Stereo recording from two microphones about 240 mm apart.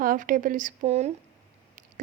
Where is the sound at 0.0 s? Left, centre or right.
Right.